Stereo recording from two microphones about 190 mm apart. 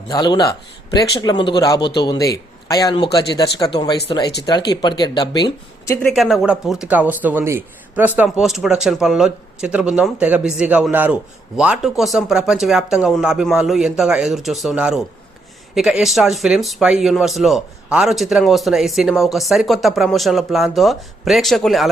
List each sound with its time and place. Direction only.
0.1 s speech: 25° left (ahead or behind)
6.1 s speech: centre (ahead or behind)